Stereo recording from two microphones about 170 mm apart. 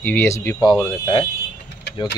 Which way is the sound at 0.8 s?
25° left (ahead or behind).